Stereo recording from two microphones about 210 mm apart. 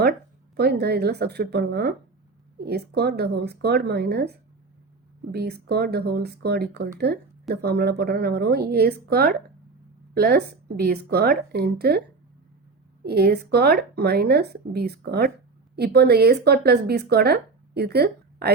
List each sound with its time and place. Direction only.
0.5 s a woman's voice: 50° right (ahead or behind)
5.3 s a woman's voice: 50° right (ahead or behind)
13.1 s a woman's voice: 50° right (ahead or behind)